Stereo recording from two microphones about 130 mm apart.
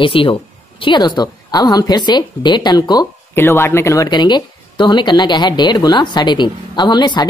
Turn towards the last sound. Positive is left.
turn(degrees=35)  # may be behind; listen again after turning